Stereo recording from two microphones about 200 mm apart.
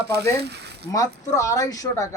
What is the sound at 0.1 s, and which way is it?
Speech, 55° right (ahead or behind).